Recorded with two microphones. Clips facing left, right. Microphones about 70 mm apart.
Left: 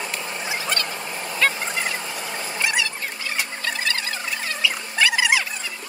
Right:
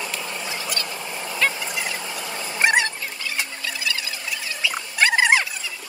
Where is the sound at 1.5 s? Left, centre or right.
Left.